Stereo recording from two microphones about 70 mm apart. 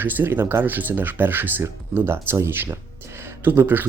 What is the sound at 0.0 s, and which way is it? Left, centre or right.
Speech, right.